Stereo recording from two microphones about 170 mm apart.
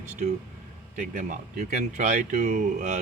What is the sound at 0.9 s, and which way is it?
Speech, 45° right (ahead or behind).